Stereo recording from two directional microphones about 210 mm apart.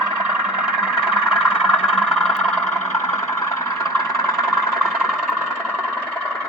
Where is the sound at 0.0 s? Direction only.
5° right (ahead or behind).